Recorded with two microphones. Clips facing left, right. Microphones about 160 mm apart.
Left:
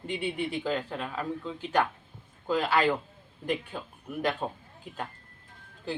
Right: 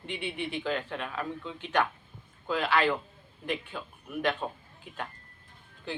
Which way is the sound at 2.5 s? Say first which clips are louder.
Left 2 dB; 40° left (ahead or behind).